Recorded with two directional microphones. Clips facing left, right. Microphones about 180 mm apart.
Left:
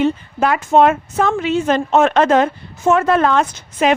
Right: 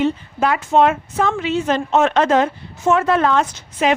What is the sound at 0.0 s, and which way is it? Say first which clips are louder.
A woman's voice: left 2 dB; 50° left (ahead or behind).